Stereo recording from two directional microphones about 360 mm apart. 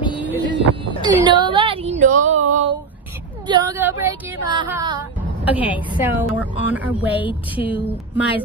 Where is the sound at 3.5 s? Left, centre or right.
Centre.